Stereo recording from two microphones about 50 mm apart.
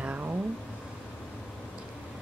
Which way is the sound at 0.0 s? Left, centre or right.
Right.